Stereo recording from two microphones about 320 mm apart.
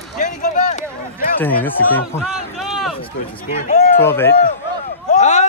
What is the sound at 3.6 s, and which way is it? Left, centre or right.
Speech, left.